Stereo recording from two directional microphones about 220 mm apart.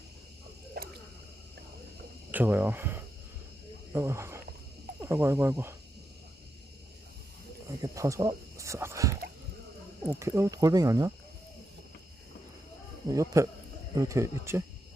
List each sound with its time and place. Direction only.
0.8 s a sound: 45° right (ahead or behind)
2.3 s speech: 10° right (ahead or behind)
7.7 s speech: 15° right (ahead or behind)
13.1 s speech: 15° right (ahead or behind)